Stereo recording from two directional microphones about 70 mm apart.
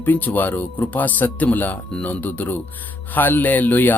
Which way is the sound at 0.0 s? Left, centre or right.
Left.